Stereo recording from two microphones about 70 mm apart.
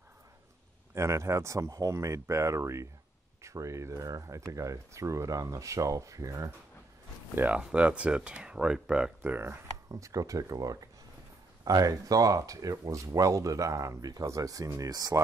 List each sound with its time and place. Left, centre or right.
0.9 s speech: right
7.3 s speech: right
9.3 s speech: right
9.8 s speech: right